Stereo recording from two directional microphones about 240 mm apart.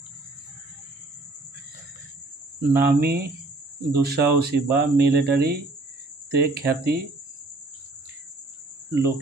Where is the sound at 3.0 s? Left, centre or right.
Right.